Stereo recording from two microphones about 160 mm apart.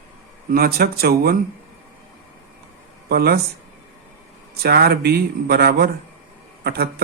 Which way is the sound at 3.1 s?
70° right (ahead or behind).